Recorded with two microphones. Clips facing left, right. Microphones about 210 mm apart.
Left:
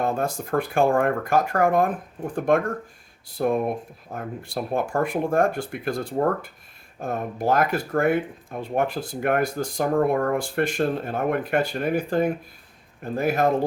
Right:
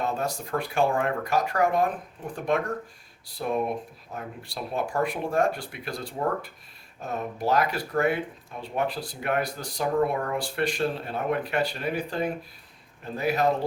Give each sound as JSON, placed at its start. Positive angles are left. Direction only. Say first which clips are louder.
{"t": 0.0, "sound": "speech", "louder": "left 4 dB", "side_deg": 50}
{"t": 3.4, "sound": "speech", "louder": "left 5 dB", "side_deg": 50}